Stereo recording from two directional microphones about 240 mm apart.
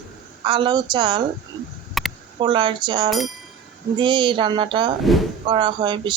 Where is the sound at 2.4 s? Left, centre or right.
Centre.